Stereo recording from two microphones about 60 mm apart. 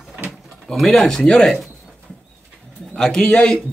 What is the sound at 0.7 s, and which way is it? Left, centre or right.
Speech, centre.